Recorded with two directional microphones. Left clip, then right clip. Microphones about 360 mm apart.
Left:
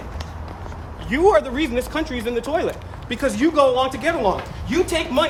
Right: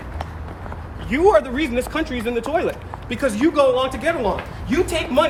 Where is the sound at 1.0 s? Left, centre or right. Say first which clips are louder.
Right 1 dB; centre.